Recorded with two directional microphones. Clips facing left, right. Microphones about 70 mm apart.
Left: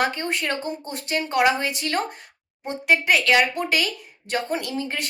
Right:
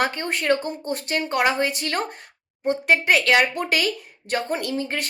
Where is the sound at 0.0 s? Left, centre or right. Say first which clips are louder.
Even; right.